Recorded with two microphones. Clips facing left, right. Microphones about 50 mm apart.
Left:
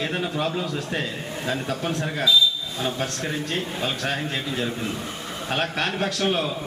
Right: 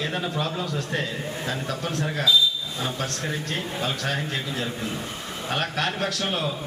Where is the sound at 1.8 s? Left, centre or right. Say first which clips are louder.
Left 2 dB; left.